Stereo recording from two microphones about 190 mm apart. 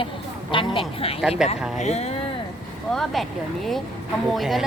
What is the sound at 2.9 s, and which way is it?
Speech, centre (ahead or behind).